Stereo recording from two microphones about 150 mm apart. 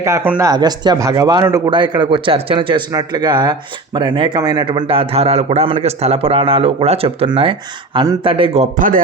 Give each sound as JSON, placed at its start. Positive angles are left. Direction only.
{"t": 0.0, "sound": "a man's voice", "side_deg": -15}